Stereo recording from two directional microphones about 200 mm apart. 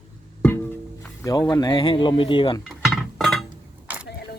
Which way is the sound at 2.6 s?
Centre (ahead or behind).